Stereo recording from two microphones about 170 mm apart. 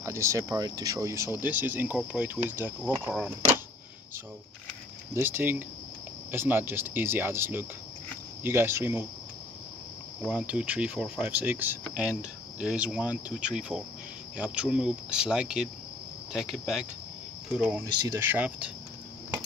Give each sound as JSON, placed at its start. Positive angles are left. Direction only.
{"t": 0.0, "sound": "speech", "side_deg": -15}
{"t": 5.1, "sound": "speech", "side_deg": -10}
{"t": 10.2, "sound": "speech", "side_deg": -5}